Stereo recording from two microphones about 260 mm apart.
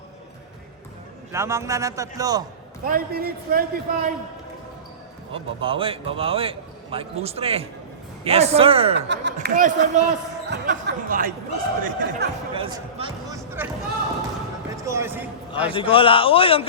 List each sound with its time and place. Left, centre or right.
1.3 s speech: centre
2.8 s a man's voice: right
5.3 s a man's voice: centre
9.0 s a man's voice: right
12.5 s speech: centre
14.8 s speech: centre
15.7 s a man's voice: centre